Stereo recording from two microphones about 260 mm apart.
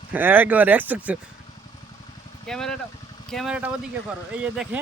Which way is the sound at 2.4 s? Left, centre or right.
Centre.